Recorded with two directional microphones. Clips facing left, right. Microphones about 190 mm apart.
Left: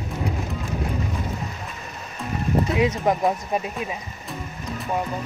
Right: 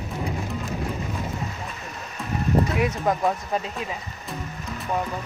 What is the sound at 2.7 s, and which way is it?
Speech, 20° left (ahead or behind).